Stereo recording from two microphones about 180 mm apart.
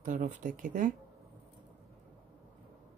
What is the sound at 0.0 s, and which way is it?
Speech, 45° right (ahead or behind).